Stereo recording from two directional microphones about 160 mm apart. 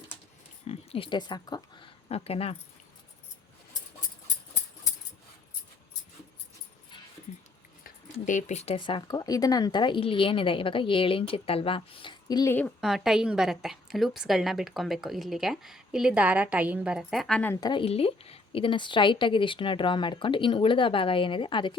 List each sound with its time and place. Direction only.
0.7 s speech: 35° left (ahead or behind)
2.0 s speech: 40° left (ahead or behind)
7.9 s speech: 55° left (ahead or behind); by 12.5 s 25° left (ahead or behind)
12.5 s a woman's voice: 5° left (ahead or behind)
17.5 s speech: 25° left (ahead or behind)